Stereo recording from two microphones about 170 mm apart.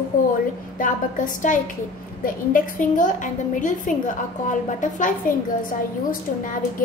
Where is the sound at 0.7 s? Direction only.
50° left (ahead or behind).